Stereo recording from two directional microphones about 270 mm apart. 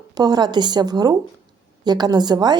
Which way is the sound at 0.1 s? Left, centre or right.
Centre.